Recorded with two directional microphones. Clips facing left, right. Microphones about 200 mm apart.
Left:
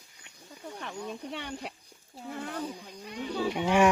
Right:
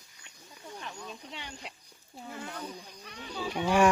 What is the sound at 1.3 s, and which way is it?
Speech, 55° left (ahead or behind).